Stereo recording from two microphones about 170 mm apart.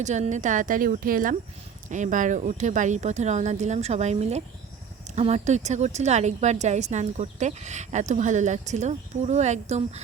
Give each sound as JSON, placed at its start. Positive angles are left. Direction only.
{"t": 0.0, "sound": "a woman's voice", "side_deg": -45}